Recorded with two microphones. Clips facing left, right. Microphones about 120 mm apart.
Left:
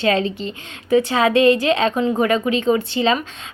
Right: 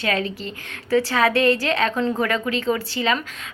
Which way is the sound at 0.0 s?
25° left (ahead or behind).